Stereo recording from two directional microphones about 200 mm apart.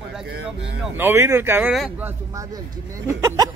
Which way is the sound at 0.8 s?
10° right (ahead or behind).